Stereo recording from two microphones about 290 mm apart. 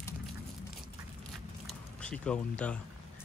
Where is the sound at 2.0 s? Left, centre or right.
Centre.